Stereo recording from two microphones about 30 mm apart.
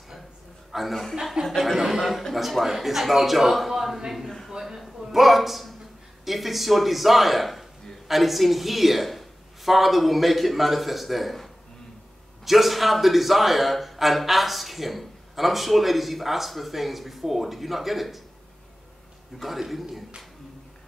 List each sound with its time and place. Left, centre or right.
0.7 s chuckle: centre
1.4 s speech: right
1.8 s a man's voice: centre
3.7 s a sound: centre
5.0 s a woman's voice: centre
19.3 s speech: centre
19.7 s a man's voice: centre